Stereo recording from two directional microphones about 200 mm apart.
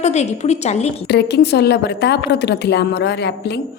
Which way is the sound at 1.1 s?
55° left (ahead or behind).